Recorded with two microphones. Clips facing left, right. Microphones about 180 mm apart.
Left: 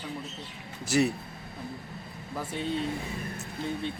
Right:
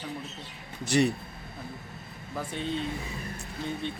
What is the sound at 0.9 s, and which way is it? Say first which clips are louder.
Speech: right 1 dB; 5° left (ahead or behind).